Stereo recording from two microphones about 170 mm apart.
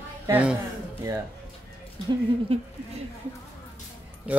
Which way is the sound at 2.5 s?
35° right (ahead or behind).